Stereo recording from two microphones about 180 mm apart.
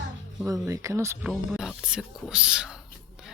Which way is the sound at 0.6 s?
15° right (ahead or behind).